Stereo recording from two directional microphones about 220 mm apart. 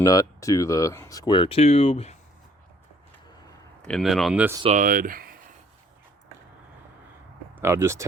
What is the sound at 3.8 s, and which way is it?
Speech, centre (ahead or behind).